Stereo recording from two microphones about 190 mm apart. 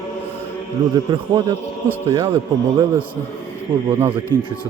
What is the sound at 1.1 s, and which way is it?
A man's voice, 20° right (ahead or behind).